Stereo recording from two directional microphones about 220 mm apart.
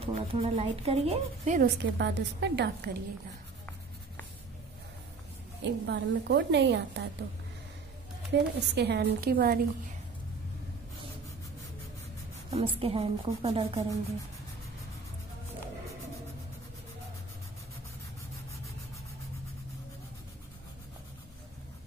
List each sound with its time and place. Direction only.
0.0 s a woman's voice: 25° right (ahead or behind)
1.8 s a woman's voice: 50° right (ahead or behind)
5.6 s a woman's voice: 55° right (ahead or behind)
8.3 s a woman's voice: 50° right (ahead or behind)
12.4 s a woman's voice: 25° right (ahead or behind)